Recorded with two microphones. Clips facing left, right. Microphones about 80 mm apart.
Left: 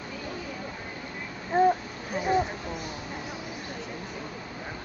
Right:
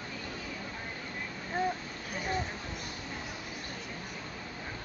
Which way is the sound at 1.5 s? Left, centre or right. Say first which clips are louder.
Left 11 dB; left.